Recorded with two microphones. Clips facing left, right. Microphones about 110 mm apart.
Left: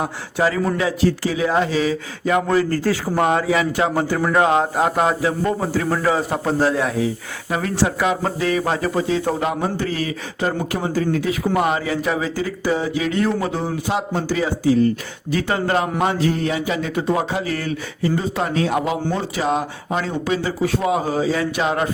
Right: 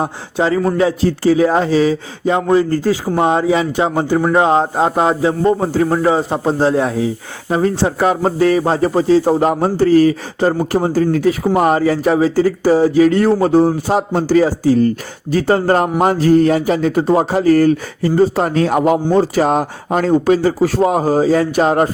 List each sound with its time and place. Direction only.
0.0 s a man's voice: 25° right (ahead or behind)